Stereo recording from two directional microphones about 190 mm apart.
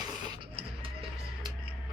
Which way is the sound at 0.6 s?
30° right (ahead or behind).